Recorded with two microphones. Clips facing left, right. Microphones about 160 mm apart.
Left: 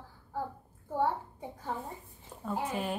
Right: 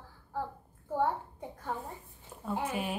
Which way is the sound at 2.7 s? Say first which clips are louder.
Left 1 dB; 5° right (ahead or behind).